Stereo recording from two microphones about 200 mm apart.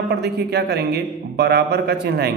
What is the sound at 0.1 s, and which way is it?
A man's voice, 55° right (ahead or behind).